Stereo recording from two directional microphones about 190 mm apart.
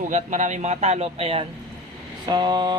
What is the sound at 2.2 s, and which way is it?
Vehicle, 20° right (ahead or behind).